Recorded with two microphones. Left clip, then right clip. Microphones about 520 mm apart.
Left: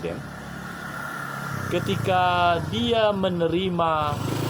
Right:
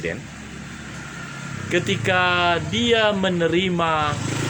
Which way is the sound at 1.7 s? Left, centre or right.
Left.